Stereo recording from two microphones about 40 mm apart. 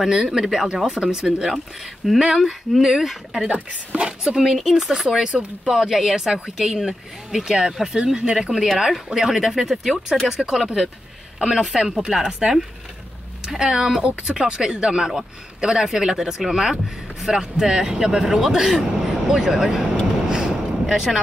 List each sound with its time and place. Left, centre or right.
0.1 s speech: centre
2.0 s speech: centre
3.4 s a woman's voice: right
4.6 s speech: centre
5.0 s speech: centre
8.0 s speech: right
8.4 s speech: centre
18.8 s vehicle: centre
20.8 s speech: centre